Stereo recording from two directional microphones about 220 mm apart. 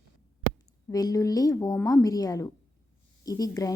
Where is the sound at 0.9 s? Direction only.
15° left (ahead or behind).